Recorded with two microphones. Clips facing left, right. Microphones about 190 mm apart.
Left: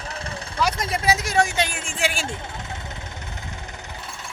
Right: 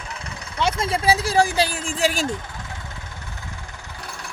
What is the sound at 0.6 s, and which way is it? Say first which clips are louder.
Speech: right 2 dB; 25° right (ahead or behind).